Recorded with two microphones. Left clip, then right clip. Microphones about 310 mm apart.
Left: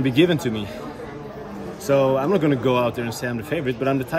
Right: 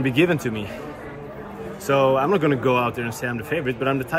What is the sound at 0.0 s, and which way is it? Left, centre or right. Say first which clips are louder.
Speech: left 1 dB; centre.